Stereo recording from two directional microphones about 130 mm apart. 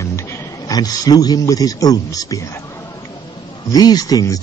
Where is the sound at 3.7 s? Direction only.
30° left (ahead or behind).